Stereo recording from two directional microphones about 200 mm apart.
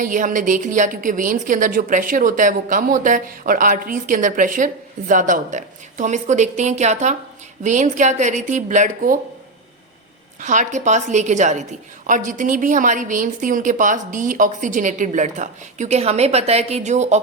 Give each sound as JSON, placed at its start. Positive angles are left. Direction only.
{"t": 0.0, "sound": "a woman's voice", "side_deg": -40}
{"t": 10.4, "sound": "a woman's voice", "side_deg": -35}